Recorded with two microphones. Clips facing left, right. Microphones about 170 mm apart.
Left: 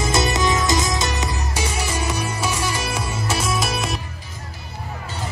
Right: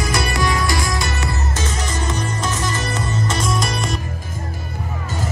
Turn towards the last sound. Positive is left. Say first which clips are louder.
# right 1 dB
turn(degrees=5)  # may be behind; listen again after turning